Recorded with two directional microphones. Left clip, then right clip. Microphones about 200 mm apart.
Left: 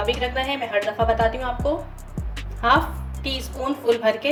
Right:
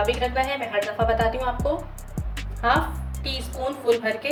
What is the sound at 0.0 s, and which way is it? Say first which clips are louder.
A woman's voice: right 1 dB; 5° left (ahead or behind).